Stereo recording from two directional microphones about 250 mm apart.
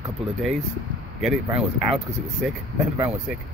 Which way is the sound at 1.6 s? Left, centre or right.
Centre.